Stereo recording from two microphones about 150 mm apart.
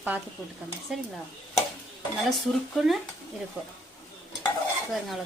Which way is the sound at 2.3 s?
Centre (ahead or behind).